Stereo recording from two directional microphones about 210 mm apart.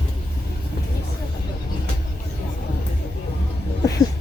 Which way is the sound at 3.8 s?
15° left (ahead or behind).